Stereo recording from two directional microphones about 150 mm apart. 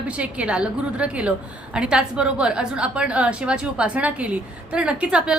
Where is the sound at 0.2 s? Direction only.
10° right (ahead or behind).